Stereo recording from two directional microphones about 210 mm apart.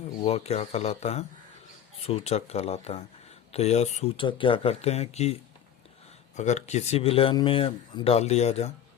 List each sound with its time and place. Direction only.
0.2 s speech: 30° left (ahead or behind)